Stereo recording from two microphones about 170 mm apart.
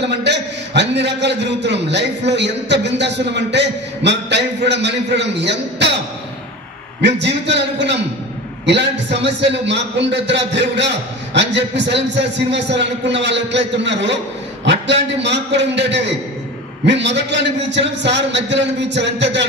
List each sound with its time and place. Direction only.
0.0 s a man's voice: 90° right
7.0 s a man's voice: 90° right